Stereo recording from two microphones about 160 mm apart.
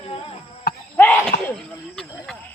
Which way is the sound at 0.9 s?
10° left (ahead or behind).